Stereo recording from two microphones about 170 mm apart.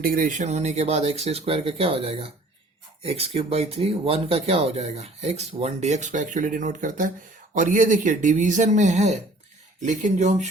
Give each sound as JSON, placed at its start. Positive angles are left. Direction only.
{"t": 0.0, "sound": "speech", "side_deg": -55}